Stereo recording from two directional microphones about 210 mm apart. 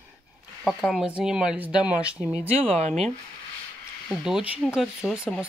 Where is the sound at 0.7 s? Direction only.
Centre (ahead or behind).